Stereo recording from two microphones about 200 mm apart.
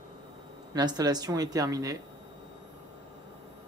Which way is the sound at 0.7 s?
20° right (ahead or behind).